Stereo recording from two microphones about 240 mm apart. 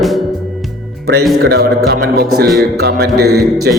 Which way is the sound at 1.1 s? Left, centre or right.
Right.